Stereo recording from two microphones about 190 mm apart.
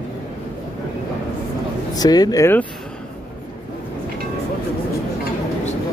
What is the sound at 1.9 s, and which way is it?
Speech, 20° left (ahead or behind).